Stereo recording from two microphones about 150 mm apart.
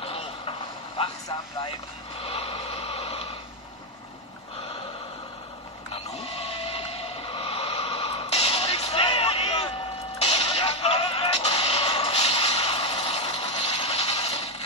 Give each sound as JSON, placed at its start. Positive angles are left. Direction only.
{"t": 0.0, "sound": "vehicle", "side_deg": 40}
{"t": 2.2, "sound": "a sound", "side_deg": 40}
{"t": 6.0, "sound": "music", "side_deg": 45}